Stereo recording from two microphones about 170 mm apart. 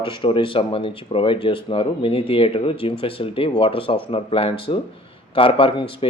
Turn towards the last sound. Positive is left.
turn(degrees=30)  # may be behind; listen again after turning